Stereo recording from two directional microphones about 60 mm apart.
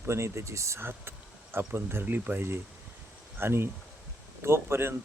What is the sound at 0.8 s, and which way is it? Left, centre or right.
Speech, right.